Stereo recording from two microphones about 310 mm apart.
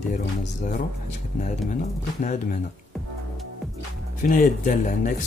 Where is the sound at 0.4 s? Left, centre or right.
Left.